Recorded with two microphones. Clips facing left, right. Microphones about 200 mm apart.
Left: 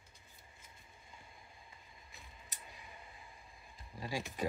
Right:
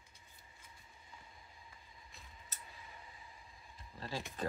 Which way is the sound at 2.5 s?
15° left (ahead or behind).